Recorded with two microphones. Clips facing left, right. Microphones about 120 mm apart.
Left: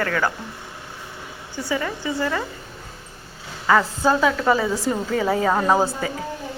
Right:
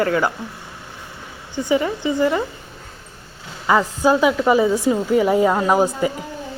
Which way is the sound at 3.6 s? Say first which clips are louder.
Right 2 dB; 15° right (ahead or behind).